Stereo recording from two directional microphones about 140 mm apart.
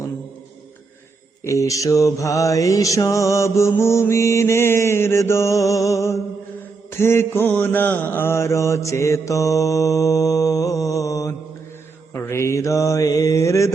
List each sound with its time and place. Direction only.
1.5 s mantra: 20° left (ahead or behind)